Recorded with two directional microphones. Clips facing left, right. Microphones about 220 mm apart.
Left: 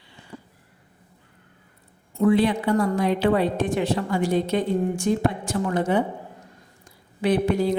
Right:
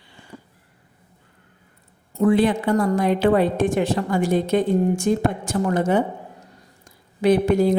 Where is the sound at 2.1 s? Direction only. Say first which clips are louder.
Right 2 dB; 45° right (ahead or behind).